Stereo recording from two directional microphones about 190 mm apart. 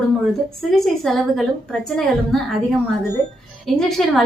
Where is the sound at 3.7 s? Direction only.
Centre (ahead or behind).